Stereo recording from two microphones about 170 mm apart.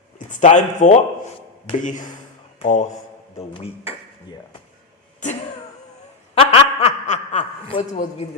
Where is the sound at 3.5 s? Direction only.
35° left (ahead or behind).